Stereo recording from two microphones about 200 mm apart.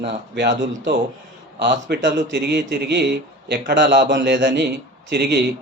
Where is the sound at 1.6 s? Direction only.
60° right (ahead or behind).